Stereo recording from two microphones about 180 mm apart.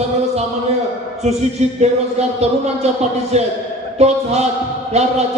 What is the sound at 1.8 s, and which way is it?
A man's voice, 35° right (ahead or behind).